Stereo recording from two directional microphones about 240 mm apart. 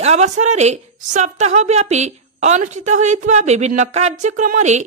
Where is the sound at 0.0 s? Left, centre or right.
Right.